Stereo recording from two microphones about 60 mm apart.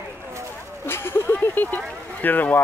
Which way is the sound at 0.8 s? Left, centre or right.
Left.